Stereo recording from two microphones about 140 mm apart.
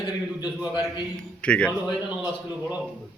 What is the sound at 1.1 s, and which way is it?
Speech, 10° left (ahead or behind).